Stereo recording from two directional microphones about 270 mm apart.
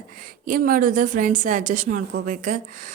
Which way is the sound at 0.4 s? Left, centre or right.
Right.